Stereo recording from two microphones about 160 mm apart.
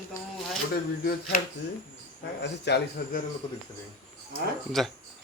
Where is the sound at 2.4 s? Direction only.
90° left.